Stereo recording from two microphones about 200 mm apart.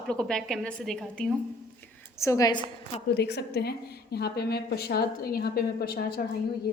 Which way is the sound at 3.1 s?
55° left (ahead or behind).